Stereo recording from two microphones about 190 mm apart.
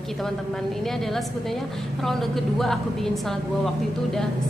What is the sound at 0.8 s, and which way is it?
A woman's voice, centre (ahead or behind).